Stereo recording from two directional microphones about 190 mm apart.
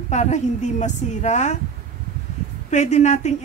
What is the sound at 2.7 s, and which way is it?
Speech, 35° left (ahead or behind).